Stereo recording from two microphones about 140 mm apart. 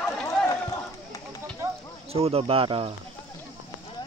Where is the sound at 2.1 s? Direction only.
45° right (ahead or behind).